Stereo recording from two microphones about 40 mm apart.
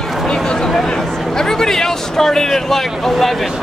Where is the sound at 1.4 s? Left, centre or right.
Centre.